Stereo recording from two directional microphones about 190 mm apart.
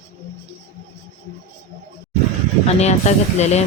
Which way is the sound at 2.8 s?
35° left (ahead or behind).